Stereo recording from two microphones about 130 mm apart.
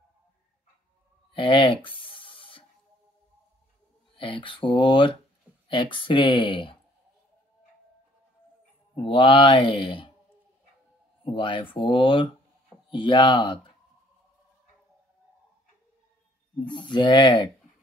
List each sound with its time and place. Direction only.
1.3 s writing: 40° left (ahead or behind)
4.2 s speech: 40° left (ahead or behind)
8.9 s speech: 45° left (ahead or behind)
11.2 s speech: 40° left (ahead or behind)
16.5 s speech: 35° left (ahead or behind)